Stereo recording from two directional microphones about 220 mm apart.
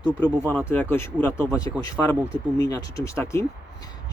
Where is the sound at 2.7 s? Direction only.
15° left (ahead or behind).